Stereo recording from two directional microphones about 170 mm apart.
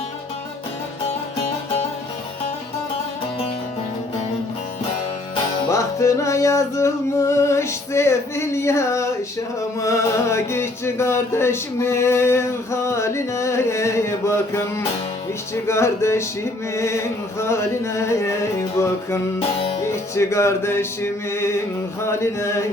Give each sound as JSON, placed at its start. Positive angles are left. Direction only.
{"t": 5.6, "sound": "music", "side_deg": 20}
{"t": 19.4, "sound": "music", "side_deg": 35}
{"t": 19.8, "sound": "music", "side_deg": 15}
{"t": 22.0, "sound": "mantra", "side_deg": 15}